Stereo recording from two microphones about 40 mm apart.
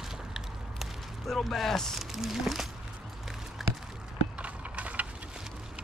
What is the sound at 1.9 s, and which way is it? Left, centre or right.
Speech, centre.